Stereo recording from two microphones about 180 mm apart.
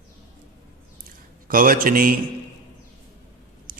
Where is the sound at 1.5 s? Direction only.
50° right (ahead or behind).